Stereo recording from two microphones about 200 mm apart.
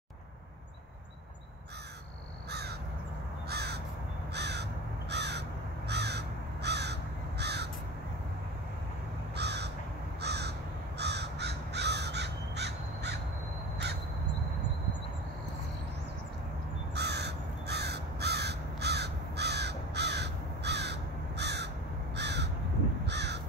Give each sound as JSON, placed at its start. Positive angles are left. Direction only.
{"t": 3.4, "sound": "crow", "side_deg": -55}
{"t": 9.4, "sound": "crow", "side_deg": -55}
{"t": 16.9, "sound": "crow", "side_deg": -55}